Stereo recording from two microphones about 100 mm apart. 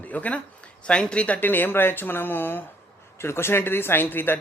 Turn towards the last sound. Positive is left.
turn(degrees=20)  # may be behind; listen again after turning